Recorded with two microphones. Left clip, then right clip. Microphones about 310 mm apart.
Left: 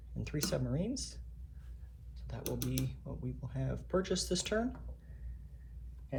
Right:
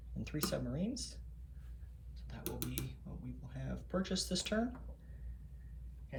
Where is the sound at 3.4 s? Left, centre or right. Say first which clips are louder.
Left 6 dB; centre.